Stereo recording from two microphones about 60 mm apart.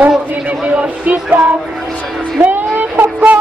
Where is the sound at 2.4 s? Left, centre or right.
Right.